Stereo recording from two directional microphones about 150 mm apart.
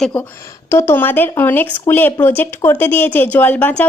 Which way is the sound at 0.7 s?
15° left (ahead or behind).